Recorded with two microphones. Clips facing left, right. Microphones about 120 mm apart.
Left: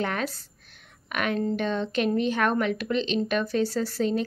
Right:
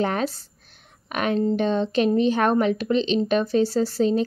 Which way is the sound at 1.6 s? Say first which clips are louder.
Right 5 dB; 35° right (ahead or behind).